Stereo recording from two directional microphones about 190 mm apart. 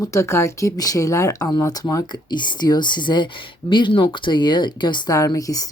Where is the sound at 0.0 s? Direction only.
15° left (ahead or behind).